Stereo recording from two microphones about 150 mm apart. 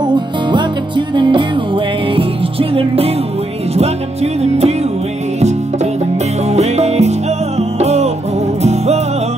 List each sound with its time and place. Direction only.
0.1 s music: 30° right (ahead or behind)
3.7 s music: 45° right (ahead or behind)
6.5 s music: 45° right (ahead or behind)